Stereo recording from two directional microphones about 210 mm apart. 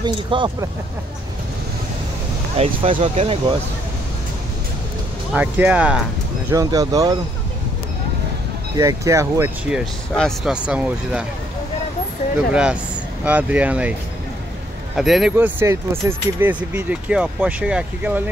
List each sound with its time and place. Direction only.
0.0 s speech: 20° right (ahead or behind)
2.5 s speech: 30° right (ahead or behind)
5.3 s speech: 5° right (ahead or behind)
6.5 s speech: 15° right (ahead or behind)
8.7 s speech: 15° right (ahead or behind)
13.2 s speech: 5° right (ahead or behind)
15.0 s speech: centre (ahead or behind)